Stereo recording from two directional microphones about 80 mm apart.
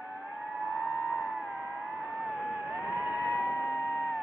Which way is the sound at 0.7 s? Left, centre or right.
Right.